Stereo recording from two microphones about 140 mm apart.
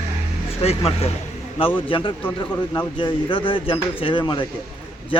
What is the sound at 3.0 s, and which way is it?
Speech, 40° left (ahead or behind).